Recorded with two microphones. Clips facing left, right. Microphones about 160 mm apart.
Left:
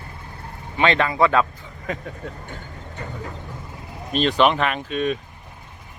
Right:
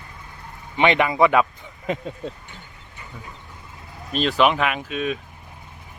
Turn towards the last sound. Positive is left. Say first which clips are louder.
# left 2 dB
turn(degrees=-5)  # may be behind; listen again after turning